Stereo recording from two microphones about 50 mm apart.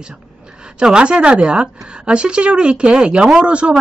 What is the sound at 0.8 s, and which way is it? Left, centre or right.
A woman's voice, centre.